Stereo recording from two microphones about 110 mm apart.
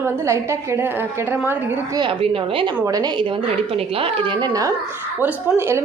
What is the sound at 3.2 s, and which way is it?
Speech, 50° right (ahead or behind).